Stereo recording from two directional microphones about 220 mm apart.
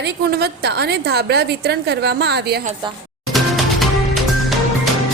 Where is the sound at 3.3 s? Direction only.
Centre (ahead or behind).